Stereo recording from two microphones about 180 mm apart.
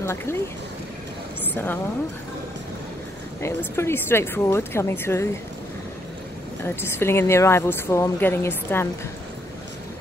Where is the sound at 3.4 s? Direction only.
15° left (ahead or behind).